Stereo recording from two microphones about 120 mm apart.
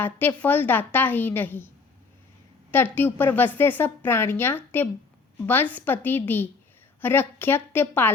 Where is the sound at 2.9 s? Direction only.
15° left (ahead or behind).